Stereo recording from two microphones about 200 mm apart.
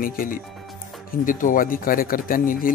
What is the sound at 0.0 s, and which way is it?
Speech, 45° left (ahead or behind).